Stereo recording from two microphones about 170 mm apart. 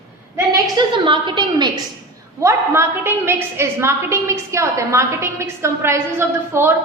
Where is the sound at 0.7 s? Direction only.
30° right (ahead or behind).